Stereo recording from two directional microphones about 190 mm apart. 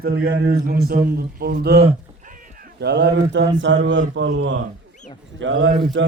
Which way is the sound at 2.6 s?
65° right (ahead or behind).